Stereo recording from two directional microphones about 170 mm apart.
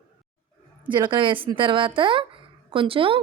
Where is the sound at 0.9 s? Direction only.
25° right (ahead or behind).